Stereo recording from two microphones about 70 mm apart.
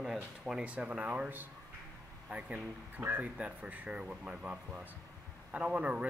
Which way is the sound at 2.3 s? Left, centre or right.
Centre.